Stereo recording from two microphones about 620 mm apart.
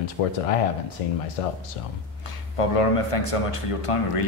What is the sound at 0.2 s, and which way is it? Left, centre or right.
Speech, left.